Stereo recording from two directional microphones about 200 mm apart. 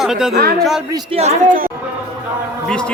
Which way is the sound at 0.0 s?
Centre (ahead or behind).